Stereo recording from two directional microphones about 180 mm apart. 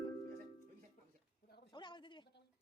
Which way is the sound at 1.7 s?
25° left (ahead or behind).